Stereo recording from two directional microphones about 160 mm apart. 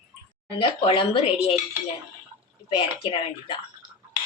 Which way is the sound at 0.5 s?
35° left (ahead or behind).